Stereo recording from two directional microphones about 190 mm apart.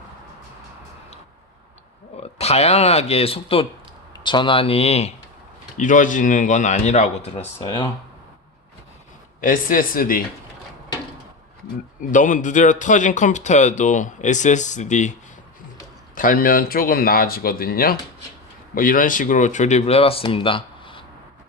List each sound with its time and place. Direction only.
2.2 s a man's voice: 35° left (ahead or behind)
5.7 s a man's voice: 45° left (ahead or behind)
9.4 s speech: 45° left (ahead or behind)
12.1 s a man's voice: 40° left (ahead or behind)
16.1 s a man's voice: 45° left (ahead or behind); by 21.0 s 25° left (ahead or behind)